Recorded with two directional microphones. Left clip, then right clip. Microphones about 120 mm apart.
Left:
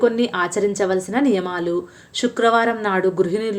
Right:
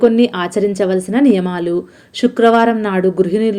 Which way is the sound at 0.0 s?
20° right (ahead or behind).